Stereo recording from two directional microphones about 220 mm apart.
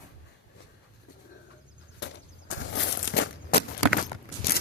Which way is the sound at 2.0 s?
55° left (ahead or behind).